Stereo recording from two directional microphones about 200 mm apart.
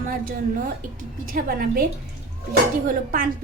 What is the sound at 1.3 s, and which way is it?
Speech, 45° right (ahead or behind).